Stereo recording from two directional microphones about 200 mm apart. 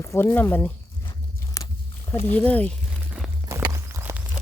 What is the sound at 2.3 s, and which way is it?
Speech, 5° left (ahead or behind).